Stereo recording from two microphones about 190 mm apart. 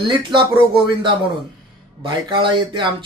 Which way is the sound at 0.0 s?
25° right (ahead or behind).